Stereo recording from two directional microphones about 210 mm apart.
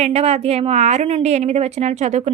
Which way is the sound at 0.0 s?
30° right (ahead or behind).